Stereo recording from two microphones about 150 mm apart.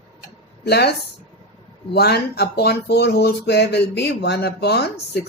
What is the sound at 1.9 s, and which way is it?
Speech, 90° left.